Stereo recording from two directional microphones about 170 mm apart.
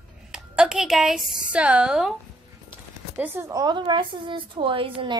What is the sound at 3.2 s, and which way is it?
A woman's voice, 20° right (ahead or behind).